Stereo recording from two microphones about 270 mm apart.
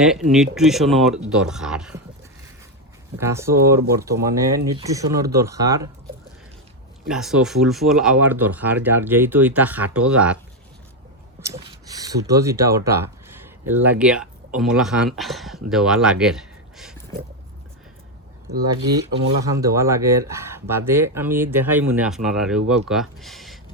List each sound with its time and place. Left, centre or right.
0.0 s speech: centre
3.2 s speech: centre
7.1 s speech: centre
11.5 s speech: centre
19.5 s speech: centre